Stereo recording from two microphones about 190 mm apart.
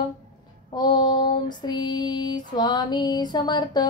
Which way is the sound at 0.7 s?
25° left (ahead or behind).